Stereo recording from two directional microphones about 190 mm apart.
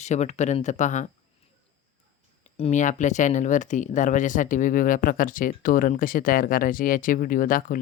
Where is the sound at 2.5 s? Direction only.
35° left (ahead or behind).